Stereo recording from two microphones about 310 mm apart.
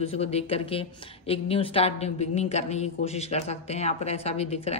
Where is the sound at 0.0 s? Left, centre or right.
Centre.